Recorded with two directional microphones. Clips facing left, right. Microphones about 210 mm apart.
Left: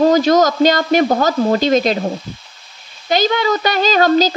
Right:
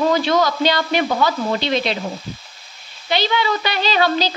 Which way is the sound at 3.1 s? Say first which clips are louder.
Left 4 dB; 45° left (ahead or behind).